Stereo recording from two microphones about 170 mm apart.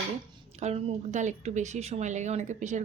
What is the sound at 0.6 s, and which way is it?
Speech, 40° right (ahead or behind).